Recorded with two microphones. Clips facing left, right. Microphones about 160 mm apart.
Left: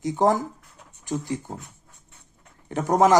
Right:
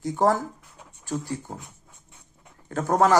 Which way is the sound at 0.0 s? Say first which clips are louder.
Left 1 dB; 20° left (ahead or behind).